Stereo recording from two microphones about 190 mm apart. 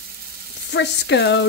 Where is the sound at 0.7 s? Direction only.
65° left (ahead or behind).